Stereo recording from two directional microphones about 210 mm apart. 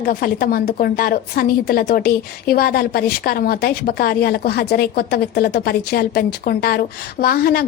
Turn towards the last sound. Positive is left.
turn(degrees=45)  # may be behind; listen again after turning